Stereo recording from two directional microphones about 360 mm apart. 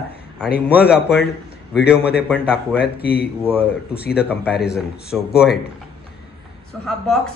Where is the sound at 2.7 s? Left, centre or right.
Left.